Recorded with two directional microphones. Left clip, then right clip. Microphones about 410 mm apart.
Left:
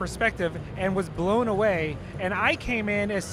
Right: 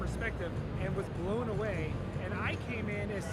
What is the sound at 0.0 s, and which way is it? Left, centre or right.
Speech, left.